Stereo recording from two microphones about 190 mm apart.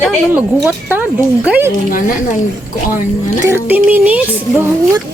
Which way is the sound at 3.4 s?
10° right (ahead or behind).